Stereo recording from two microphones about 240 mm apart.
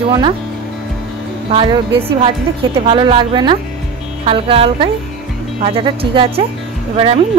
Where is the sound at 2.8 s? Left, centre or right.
Right.